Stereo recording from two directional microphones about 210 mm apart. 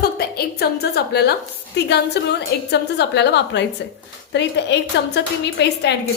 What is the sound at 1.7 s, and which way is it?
A woman's voice, 55° left (ahead or behind).